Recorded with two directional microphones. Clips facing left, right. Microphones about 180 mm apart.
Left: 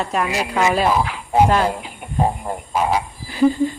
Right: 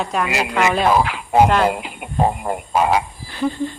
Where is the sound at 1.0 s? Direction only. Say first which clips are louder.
Right 2 dB; 75° right (ahead or behind).